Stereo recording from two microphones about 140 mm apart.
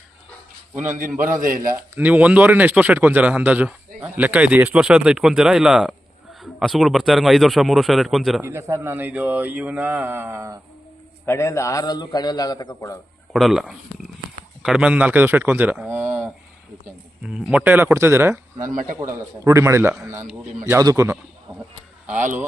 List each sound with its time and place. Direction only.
0.7 s a man's voice: 15° right (ahead or behind)
1.3 s a man's voice: 70° right (ahead or behind)
2.0 s a man's voice: 10° right (ahead or behind)
8.4 s a man's voice: 20° right (ahead or behind)
11.3 s a man's voice: 20° left (ahead or behind)
13.3 s a man's voice: 5° right (ahead or behind); by 21.2 s 20° right (ahead or behind)
22.0 s speech: 10° right (ahead or behind)